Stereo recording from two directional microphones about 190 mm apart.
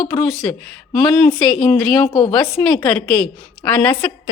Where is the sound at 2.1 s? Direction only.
25° left (ahead or behind).